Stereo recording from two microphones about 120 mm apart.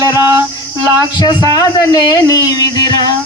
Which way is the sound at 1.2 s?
30° left (ahead or behind).